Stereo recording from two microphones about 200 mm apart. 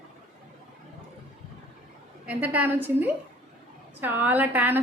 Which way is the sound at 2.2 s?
5° right (ahead or behind).